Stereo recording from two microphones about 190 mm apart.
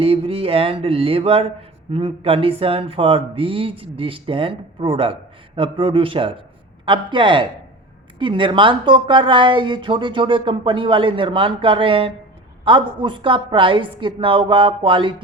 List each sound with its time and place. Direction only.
0.0 s speech: 30° right (ahead or behind)